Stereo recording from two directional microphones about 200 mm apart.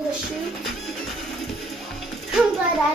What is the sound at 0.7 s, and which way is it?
Music, centre (ahead or behind).